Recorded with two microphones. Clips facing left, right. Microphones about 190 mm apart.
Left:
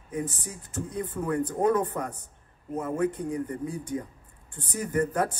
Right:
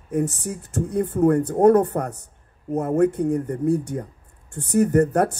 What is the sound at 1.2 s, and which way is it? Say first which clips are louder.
Speech: right 10 dB; 55° right (ahead or behind).